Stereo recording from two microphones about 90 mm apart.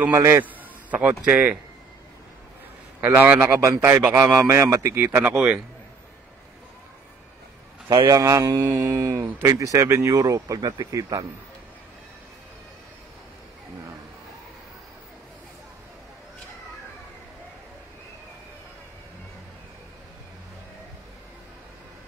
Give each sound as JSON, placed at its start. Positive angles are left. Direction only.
{"t": 0.1, "sound": "a man's voice", "side_deg": -30}
{"t": 0.8, "sound": "speech", "side_deg": -15}
{"t": 3.0, "sound": "a man's voice", "side_deg": -20}
{"t": 8.1, "sound": "speech", "side_deg": -35}